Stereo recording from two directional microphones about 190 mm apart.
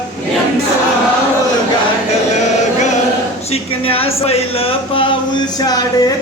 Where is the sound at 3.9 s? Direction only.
30° left (ahead or behind).